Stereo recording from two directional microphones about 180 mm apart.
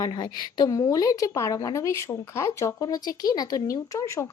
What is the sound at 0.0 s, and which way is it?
A woman's voice, 25° left (ahead or behind).